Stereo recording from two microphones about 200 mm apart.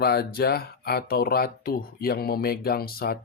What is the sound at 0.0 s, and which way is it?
Speech, 50° left (ahead or behind).